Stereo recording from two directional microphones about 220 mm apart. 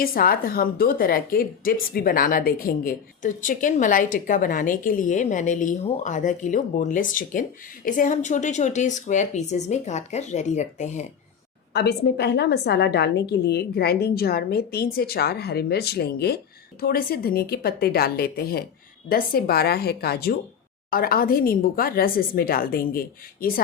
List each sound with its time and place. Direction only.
0.0 s a woman's voice: 40° left (ahead or behind)
11.7 s a woman's voice: 50° left (ahead or behind)